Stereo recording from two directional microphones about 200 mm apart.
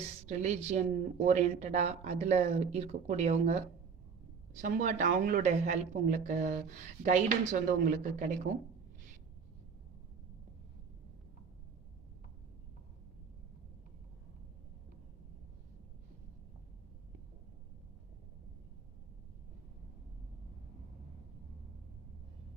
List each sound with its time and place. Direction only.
0.3 s speech: 35° right (ahead or behind)